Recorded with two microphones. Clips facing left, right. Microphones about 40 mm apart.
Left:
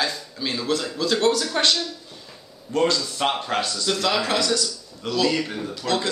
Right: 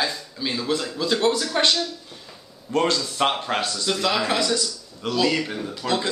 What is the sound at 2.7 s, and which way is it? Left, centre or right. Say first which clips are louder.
Speech: even; right.